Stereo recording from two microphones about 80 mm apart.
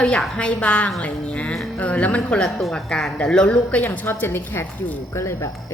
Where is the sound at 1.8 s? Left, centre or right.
Centre.